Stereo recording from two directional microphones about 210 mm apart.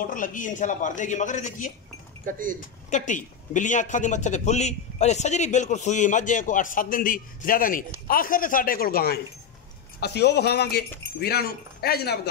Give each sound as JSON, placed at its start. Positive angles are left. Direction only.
{"t": 0.0, "sound": "a man's voice", "side_deg": 40}
{"t": 2.2, "sound": "speech", "side_deg": -40}
{"t": 2.9, "sound": "a man's voice", "side_deg": 35}